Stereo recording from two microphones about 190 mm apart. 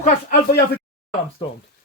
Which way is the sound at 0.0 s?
50° left (ahead or behind).